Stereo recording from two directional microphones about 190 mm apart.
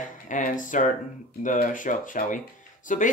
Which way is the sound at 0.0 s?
45° left (ahead or behind).